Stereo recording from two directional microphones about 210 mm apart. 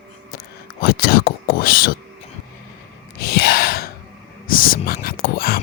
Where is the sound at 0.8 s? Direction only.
45° left (ahead or behind).